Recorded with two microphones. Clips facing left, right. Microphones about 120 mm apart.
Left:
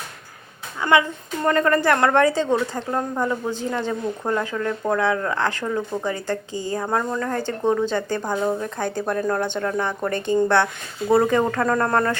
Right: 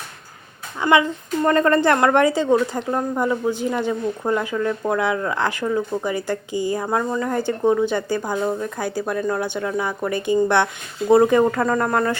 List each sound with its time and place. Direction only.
0.8 s a woman's voice: 20° right (ahead or behind)